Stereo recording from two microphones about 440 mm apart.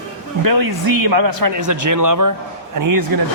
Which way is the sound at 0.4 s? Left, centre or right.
Right.